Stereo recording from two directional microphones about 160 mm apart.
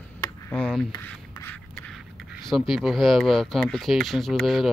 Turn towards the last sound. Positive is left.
turn(degrees=0)  # may be behind; listen again after turning